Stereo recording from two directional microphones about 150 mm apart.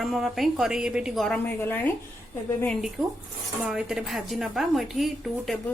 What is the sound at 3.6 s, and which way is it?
Speech, 5° right (ahead or behind).